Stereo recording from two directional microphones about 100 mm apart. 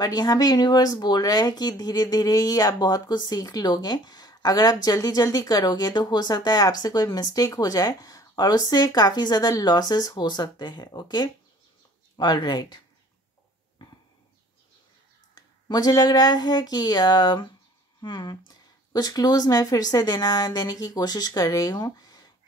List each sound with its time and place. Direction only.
0.0 s speech: 40° left (ahead or behind)
15.3 s speech: 40° left (ahead or behind)